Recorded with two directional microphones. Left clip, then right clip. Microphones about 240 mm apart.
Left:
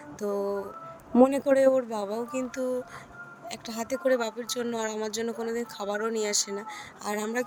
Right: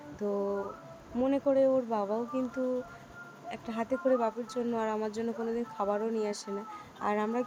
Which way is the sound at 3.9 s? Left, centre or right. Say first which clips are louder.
Left 2 dB; left.